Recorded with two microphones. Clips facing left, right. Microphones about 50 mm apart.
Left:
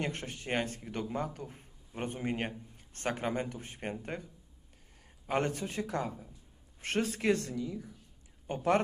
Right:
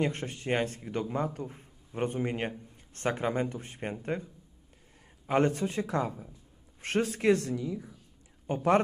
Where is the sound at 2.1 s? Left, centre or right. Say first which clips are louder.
Right 3 dB; centre.